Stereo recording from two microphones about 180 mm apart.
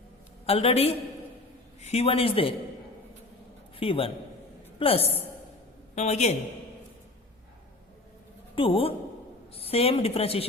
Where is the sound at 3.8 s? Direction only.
30° left (ahead or behind).